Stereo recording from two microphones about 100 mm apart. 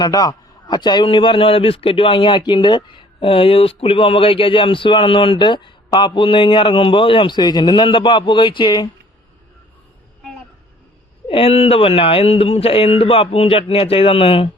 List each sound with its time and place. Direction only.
0.0 s a man's voice: 40° left (ahead or behind)
1.0 s a man's voice: 60° left (ahead or behind)
11.3 s speech: 70° left (ahead or behind)